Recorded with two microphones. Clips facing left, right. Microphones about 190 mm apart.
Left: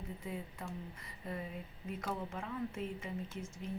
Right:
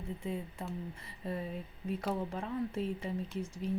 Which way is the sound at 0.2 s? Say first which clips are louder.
Right 5 dB; 25° right (ahead or behind).